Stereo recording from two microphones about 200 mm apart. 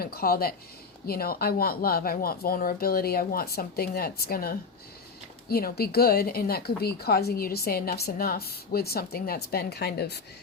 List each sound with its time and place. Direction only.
0.0 s a woman's voice: 50° left (ahead or behind)